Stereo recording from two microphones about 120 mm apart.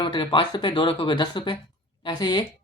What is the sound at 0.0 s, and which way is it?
A woman's voice, 45° left (ahead or behind).